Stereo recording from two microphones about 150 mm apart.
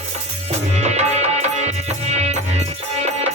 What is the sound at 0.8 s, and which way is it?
Music, 45° right (ahead or behind).